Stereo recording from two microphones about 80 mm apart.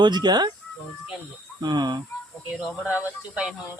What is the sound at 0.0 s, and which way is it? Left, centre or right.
Speech, right.